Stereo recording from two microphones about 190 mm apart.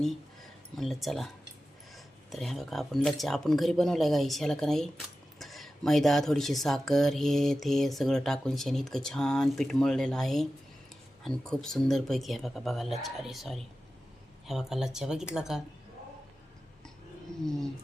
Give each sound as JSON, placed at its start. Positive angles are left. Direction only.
{"t": 0.8, "sound": "speech", "side_deg": 0}
{"t": 2.3, "sound": "speech", "side_deg": 0}